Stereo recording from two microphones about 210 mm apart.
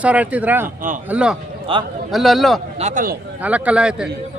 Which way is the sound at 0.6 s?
40° right (ahead or behind).